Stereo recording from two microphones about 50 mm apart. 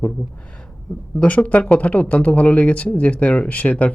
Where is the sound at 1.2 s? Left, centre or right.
Left.